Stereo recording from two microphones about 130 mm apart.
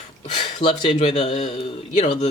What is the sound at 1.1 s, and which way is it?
Speech, 60° left (ahead or behind).